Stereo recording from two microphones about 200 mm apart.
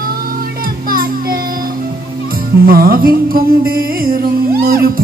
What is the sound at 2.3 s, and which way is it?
Music, 45° right (ahead or behind).